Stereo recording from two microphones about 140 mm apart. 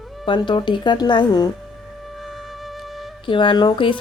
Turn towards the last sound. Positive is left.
turn(degrees=35)  # may be behind; listen again after turning